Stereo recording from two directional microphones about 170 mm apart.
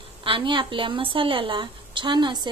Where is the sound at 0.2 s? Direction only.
30° right (ahead or behind).